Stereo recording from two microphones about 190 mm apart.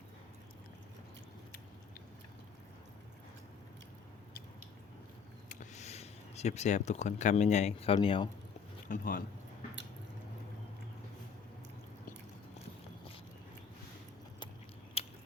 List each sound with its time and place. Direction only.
5.5 s speech: 40° left (ahead or behind)
8.9 s speech: 50° left (ahead or behind)
15.0 s a sound: 30° left (ahead or behind)